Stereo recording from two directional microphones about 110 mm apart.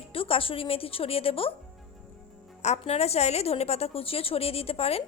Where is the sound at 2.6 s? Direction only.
80° left.